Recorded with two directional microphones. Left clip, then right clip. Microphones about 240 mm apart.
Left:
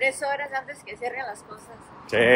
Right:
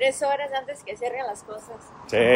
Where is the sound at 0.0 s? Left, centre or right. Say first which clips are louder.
Right 2 dB; right.